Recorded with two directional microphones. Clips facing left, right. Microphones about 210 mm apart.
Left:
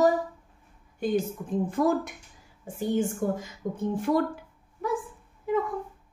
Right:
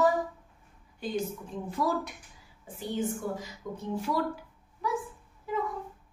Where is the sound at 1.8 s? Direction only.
50° left (ahead or behind).